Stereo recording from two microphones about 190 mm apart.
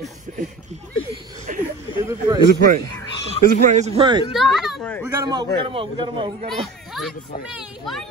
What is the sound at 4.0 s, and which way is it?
Speech, 25° right (ahead or behind).